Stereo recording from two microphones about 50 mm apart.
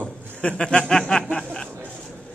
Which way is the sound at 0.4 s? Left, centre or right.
Centre.